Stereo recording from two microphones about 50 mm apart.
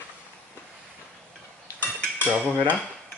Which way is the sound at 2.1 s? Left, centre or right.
Left.